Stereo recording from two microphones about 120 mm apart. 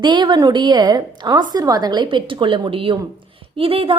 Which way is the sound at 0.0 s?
40° right (ahead or behind).